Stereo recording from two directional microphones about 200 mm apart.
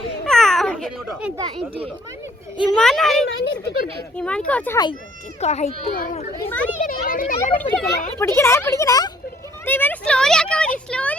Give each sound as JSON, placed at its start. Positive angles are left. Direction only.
{"t": 0.3, "sound": "a sound", "side_deg": 0}
{"t": 1.4, "sound": "speech", "side_deg": -25}
{"t": 2.7, "sound": "a woman's voice", "side_deg": 0}
{"t": 3.4, "sound": "a child's voice", "side_deg": 55}
{"t": 4.2, "sound": "speech", "side_deg": 5}
{"t": 5.4, "sound": "a child's voice", "side_deg": 35}
{"t": 6.4, "sound": "speech", "side_deg": 10}
{"t": 6.8, "sound": "a child's voice", "side_deg": 45}
{"t": 7.8, "sound": "speech", "side_deg": 10}
{"t": 9.6, "sound": "a sound", "side_deg": 10}
{"t": 10.8, "sound": "a woman's voice", "side_deg": 5}